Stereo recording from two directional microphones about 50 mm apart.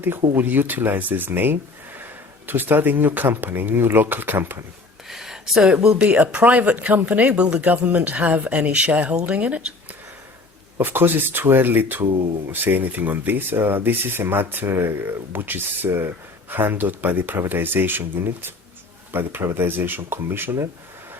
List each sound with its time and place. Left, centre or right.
0.0 s speech: right
5.0 s a sound: centre
5.6 s speech: right
10.8 s speech: right